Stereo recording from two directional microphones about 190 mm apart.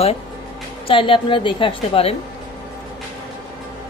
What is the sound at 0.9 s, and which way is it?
A woman's voice, 25° left (ahead or behind).